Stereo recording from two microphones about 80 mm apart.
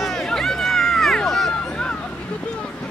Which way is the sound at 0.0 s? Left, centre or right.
Centre.